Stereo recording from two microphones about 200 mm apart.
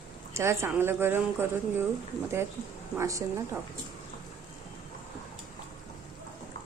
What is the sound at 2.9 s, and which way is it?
Speech, 15° right (ahead or behind).